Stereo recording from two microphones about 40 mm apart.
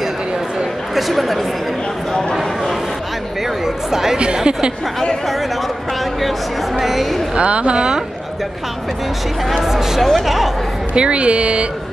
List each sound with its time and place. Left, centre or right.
0.9 s a woman's voice: centre
3.6 s speech: centre
4.5 s speech: right
6.2 s a woman's voice: centre
7.3 s speech: right
7.7 s speech: centre
9.7 s a woman's voice: centre
11.0 s speech: right